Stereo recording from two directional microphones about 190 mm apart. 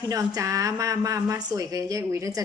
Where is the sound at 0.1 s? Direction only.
20° right (ahead or behind).